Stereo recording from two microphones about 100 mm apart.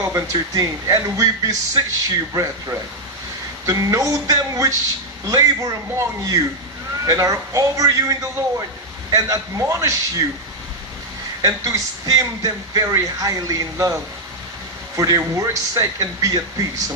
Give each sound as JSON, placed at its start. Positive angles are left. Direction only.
{"t": 0.0, "sound": "speech", "side_deg": -30}
{"t": 3.6, "sound": "speech", "side_deg": -35}
{"t": 11.4, "sound": "speech", "side_deg": -35}
{"t": 15.0, "sound": "speech", "side_deg": -35}